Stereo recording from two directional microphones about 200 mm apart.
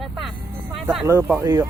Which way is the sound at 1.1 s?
10° right (ahead or behind).